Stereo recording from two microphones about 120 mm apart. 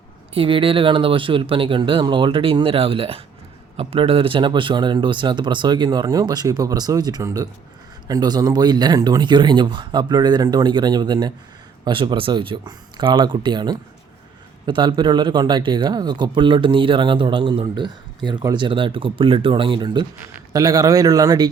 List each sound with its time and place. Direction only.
0.3 s speech: 45° right (ahead or behind); by 21.5 s 30° right (ahead or behind)